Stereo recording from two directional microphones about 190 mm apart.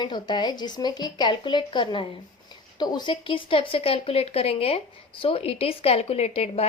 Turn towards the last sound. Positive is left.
turn(degrees=35)  # may be behind; listen again after turning